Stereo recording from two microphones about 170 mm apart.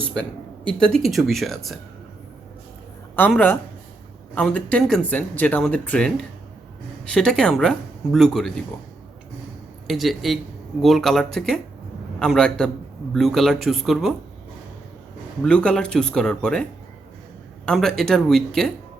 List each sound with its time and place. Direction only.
0.7 s speech: 5° left (ahead or behind)
3.2 s speech: 10° left (ahead or behind)
9.8 s speech: centre (ahead or behind)
15.4 s speech: 5° left (ahead or behind)
17.7 s speech: centre (ahead or behind)